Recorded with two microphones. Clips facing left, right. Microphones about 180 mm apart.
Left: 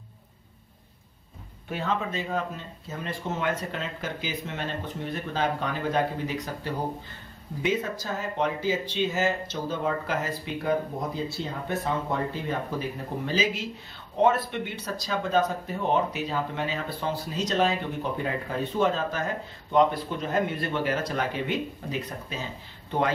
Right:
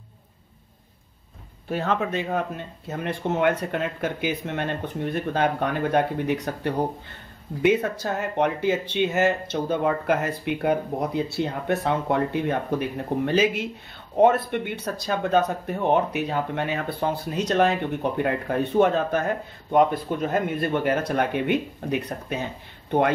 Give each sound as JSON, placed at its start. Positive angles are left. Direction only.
{"t": 1.9, "sound": "speech", "side_deg": -65}